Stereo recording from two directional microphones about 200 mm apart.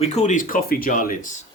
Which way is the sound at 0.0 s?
35° left (ahead or behind).